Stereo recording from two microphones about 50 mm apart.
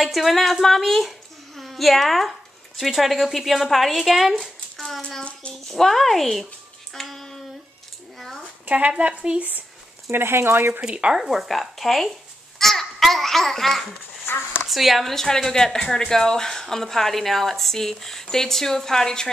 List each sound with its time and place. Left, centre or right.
0.0 s speech: centre
6.9 s hands: centre
8.6 s speech: right
10.1 s speech: right
10.9 s speech: centre
11.1 s a child's voice: centre
14.2 s a sound: left
14.7 s speech: centre